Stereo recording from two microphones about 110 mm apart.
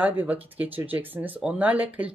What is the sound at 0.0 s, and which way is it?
Speech, 15° right (ahead or behind).